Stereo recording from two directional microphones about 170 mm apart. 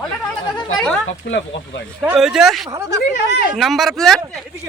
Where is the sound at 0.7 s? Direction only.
5° left (ahead or behind).